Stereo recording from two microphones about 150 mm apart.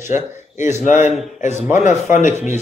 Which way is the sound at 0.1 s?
55° left (ahead or behind).